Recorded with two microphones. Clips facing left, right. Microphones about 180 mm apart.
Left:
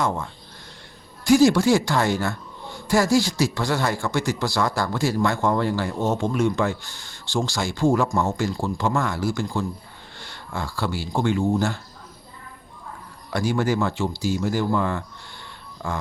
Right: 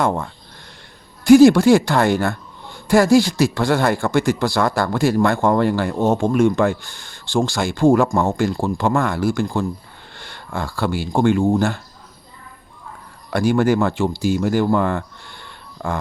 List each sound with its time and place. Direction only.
1.2 s speech: 60° right (ahead or behind)
13.3 s speech: 60° right (ahead or behind)